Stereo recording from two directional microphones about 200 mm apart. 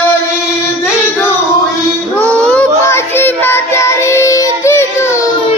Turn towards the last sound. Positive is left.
turn(degrees=15)  # may be behind; listen again after turning